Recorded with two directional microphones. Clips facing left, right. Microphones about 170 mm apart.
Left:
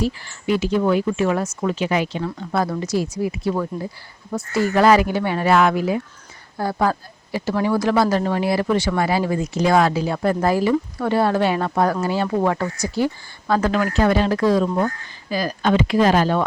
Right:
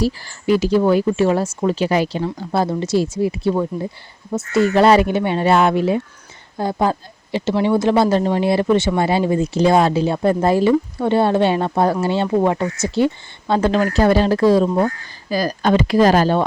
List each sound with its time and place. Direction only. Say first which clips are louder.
0.0 s a woman's voice: right 3 dB; 35° right (ahead or behind)